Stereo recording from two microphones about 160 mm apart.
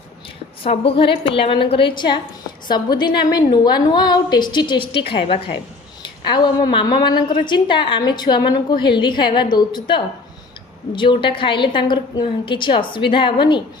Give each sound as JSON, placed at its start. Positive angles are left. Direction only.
{"t": 0.6, "sound": "a woman's voice", "side_deg": 35}